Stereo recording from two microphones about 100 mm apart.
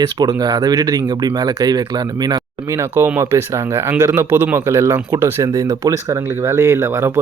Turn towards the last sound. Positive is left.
turn(degrees=-25)  # may be behind; listen again after turning